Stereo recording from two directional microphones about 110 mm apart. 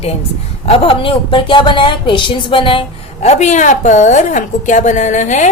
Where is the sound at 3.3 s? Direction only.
90° left.